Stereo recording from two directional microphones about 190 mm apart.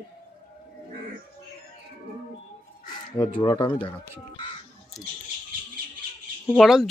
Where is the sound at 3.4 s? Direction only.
20° left (ahead or behind).